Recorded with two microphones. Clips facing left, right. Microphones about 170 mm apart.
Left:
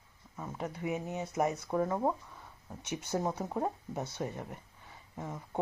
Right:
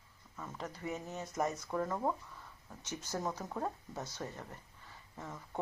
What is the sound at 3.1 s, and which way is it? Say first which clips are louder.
Speech: left 5 dB; 25° left (ahead or behind).